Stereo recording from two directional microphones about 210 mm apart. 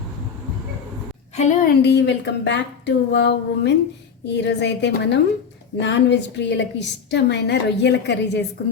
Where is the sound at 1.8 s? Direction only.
55° left (ahead or behind).